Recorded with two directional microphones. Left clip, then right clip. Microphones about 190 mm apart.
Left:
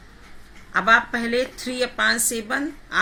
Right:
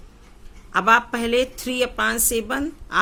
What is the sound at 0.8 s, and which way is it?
Speech, 60° right (ahead or behind).